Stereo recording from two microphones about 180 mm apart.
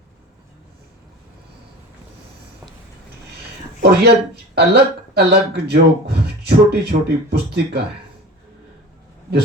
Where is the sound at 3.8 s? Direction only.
65° right (ahead or behind).